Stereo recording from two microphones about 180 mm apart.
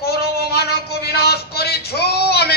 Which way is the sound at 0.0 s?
60° left (ahead or behind).